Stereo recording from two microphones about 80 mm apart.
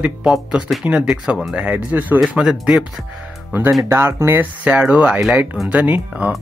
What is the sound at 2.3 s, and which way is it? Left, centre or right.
Speech, centre.